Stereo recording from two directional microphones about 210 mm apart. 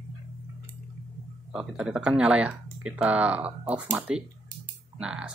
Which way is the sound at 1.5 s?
5° right (ahead or behind).